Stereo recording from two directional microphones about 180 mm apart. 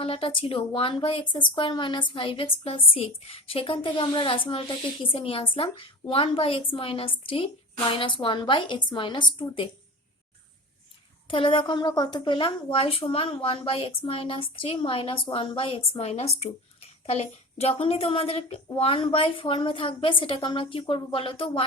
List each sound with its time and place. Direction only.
0.0 s a woman's voice: 30° left (ahead or behind)
11.3 s a woman's voice: 30° left (ahead or behind)